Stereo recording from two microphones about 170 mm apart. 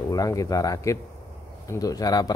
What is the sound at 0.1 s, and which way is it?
Speech, 20° left (ahead or behind).